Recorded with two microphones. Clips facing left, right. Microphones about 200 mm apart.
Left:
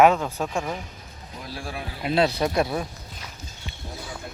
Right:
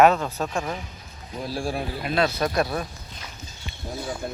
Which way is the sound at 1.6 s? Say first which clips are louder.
Right 7 dB; 30° right (ahead or behind).